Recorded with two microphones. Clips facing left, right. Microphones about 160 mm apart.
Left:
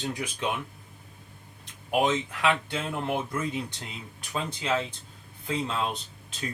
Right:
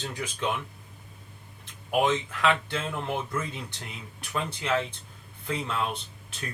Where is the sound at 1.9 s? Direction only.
15° left (ahead or behind).